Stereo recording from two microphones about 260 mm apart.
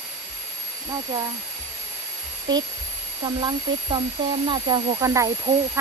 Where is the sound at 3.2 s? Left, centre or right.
Centre.